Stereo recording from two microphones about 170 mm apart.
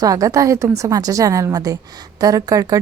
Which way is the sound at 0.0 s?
20° right (ahead or behind).